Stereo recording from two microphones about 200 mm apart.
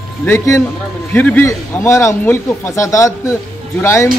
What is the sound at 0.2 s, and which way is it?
A man's voice, 10° left (ahead or behind).